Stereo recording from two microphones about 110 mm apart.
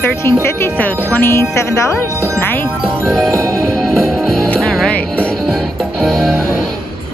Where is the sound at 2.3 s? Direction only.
15° left (ahead or behind).